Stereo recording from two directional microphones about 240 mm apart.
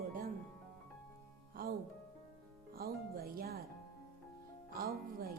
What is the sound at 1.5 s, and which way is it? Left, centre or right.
Speech, right.